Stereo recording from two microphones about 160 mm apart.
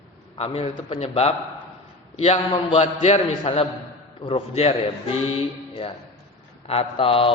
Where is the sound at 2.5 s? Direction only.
40° left (ahead or behind).